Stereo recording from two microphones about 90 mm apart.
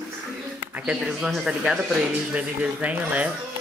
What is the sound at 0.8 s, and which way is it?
Speech, 10° right (ahead or behind).